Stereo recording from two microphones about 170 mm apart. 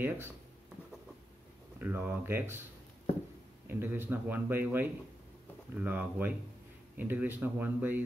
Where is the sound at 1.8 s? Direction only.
10° right (ahead or behind).